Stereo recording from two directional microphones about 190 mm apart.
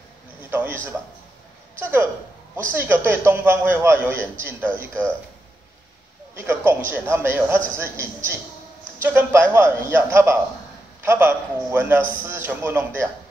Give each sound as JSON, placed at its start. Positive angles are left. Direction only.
{"t": 0.5, "sound": "a sound", "side_deg": -10}
{"t": 1.8, "sound": "a man's voice", "side_deg": -10}
{"t": 6.4, "sound": "a man's voice", "side_deg": -10}